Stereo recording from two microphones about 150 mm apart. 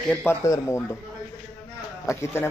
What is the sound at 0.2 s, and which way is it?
Speech, 15° left (ahead or behind).